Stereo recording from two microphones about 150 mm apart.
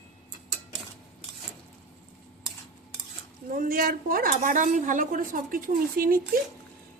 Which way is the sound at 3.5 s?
70° right (ahead or behind).